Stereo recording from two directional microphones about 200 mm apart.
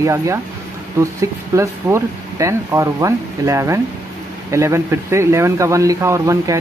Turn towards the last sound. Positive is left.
turn(degrees=-15)  # may be behind; listen again after turning